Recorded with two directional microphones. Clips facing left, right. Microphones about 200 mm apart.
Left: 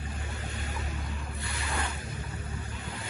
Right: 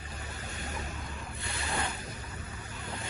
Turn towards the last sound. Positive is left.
turn(degrees=-30)  # may be behind; listen again after turning